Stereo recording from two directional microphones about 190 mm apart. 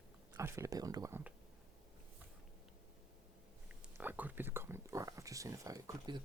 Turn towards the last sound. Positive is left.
turn(degrees=-20)  # may be behind; listen again after turning